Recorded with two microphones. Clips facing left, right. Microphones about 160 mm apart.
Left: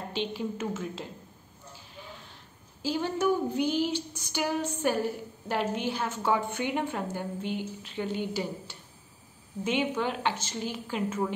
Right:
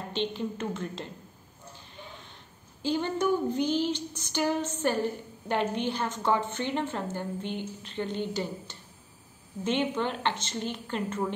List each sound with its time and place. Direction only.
0.1 s female singing: 5° left (ahead or behind)
2.8 s female singing: 5° left (ahead or behind)